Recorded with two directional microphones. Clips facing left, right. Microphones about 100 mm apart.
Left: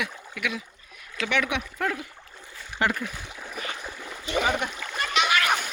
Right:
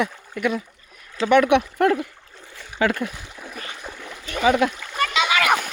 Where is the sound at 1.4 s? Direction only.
60° right (ahead or behind).